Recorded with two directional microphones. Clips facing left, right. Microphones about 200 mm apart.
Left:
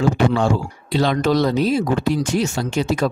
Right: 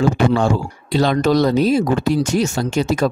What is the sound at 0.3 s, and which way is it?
Speech, 40° right (ahead or behind).